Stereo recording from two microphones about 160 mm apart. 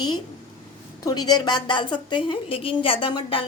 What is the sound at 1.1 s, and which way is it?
A woman's voice, 25° left (ahead or behind).